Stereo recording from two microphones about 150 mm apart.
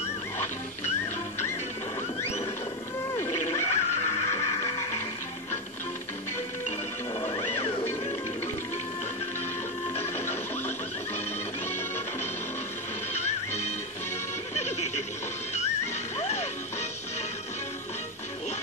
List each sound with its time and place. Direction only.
3.6 s music: 45° left (ahead or behind)
4.3 s music: 20° left (ahead or behind)
4.6 s music: 40° left (ahead or behind)
7.2 s music: 40° left (ahead or behind)
9.9 s music: 45° left (ahead or behind)
13.1 s neigh: 50° left (ahead or behind)
14.5 s music: 50° left (ahead or behind)
16.2 s music: 45° left (ahead or behind)